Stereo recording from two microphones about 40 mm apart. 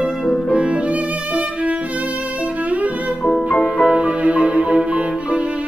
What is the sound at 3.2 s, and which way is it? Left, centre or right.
Music, left.